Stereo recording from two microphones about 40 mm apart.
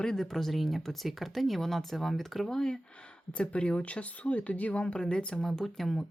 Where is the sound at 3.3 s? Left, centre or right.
Left.